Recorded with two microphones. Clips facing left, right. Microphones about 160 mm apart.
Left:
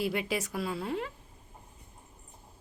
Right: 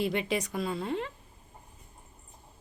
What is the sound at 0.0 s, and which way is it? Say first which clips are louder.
Speech: right 2 dB; 5° left (ahead or behind).